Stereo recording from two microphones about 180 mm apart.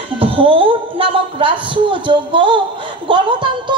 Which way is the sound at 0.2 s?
30° right (ahead or behind).